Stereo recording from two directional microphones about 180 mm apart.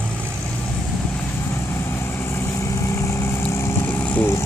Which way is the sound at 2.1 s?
15° left (ahead or behind).